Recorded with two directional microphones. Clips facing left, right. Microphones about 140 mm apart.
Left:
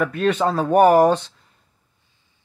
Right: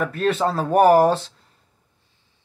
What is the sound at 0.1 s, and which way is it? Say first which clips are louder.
Speech: left 1 dB; 35° right (ahead or behind).